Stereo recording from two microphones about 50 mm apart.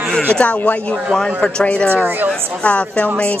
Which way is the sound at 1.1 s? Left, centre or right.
Centre.